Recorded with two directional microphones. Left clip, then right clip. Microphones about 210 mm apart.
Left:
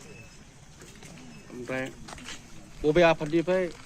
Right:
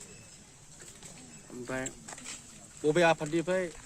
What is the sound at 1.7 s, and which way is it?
Speech, 45° right (ahead or behind).